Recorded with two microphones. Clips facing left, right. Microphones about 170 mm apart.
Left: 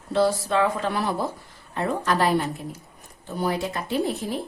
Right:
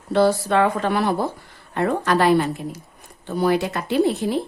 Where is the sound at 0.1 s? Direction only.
60° right (ahead or behind).